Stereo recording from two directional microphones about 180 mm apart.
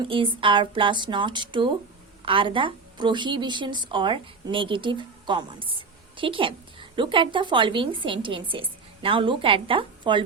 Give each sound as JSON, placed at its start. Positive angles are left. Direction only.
{"t": 0.0, "sound": "a woman's voice", "side_deg": -30}